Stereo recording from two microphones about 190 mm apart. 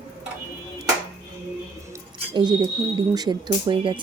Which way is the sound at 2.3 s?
20° right (ahead or behind).